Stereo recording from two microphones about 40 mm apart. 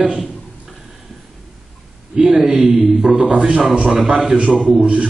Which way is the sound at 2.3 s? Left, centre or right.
Centre.